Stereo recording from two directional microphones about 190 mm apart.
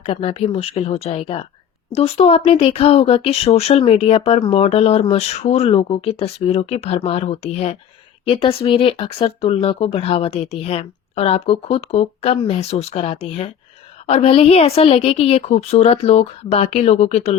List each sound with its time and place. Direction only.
0.0 s speech: 30° left (ahead or behind)